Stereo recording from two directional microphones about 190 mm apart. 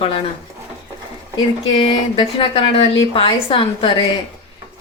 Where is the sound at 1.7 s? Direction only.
30° left (ahead or behind).